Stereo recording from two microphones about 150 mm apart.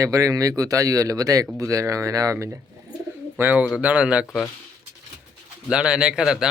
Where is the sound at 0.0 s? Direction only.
20° right (ahead or behind).